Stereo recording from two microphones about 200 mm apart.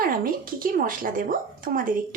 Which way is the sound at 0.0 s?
45° right (ahead or behind).